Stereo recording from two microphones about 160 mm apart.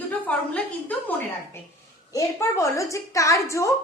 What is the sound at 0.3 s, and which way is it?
Speech, 10° left (ahead or behind).